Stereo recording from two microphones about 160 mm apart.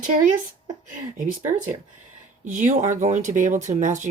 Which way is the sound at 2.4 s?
50° right (ahead or behind).